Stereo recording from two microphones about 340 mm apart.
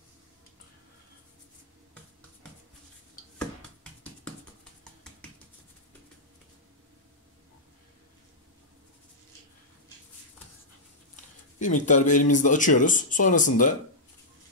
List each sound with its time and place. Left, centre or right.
11.6 s speech: left